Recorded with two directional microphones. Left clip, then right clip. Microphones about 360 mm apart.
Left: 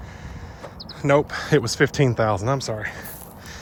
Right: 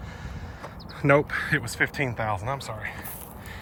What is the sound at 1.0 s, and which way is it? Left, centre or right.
Speech, centre.